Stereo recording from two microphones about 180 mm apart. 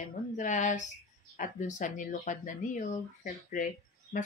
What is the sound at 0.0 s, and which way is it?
Speech, 45° left (ahead or behind).